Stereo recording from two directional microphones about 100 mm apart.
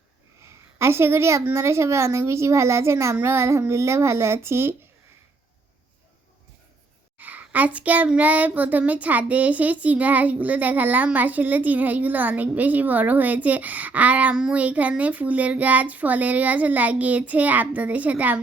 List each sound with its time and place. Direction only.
0.4 s a sound: 25° right (ahead or behind)
1.5 s a woman's voice: 25° right (ahead or behind)
7.2 s child singing: 15° right (ahead or behind)